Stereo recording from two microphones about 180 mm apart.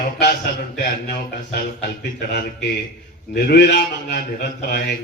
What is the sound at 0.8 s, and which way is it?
A man's voice, 65° left (ahead or behind).